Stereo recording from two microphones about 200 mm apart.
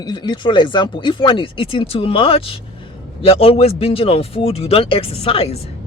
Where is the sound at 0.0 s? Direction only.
20° left (ahead or behind).